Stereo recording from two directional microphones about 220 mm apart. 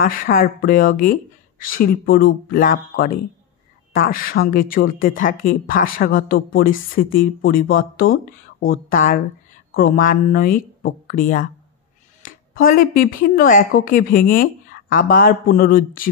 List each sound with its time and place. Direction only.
0.0 s speech: 40° left (ahead or behind)